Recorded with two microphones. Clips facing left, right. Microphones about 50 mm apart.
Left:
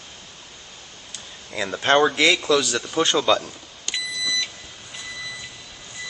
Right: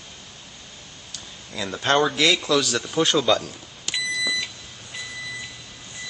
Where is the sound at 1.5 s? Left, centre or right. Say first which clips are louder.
Left 3 dB; left.